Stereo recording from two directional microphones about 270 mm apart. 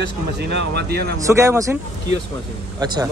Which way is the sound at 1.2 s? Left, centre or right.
Centre.